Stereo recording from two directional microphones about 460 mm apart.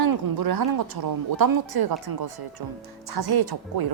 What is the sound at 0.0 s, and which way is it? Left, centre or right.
Speech, right.